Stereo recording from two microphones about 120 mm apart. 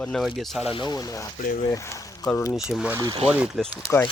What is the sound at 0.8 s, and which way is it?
Speech, 30° left (ahead or behind).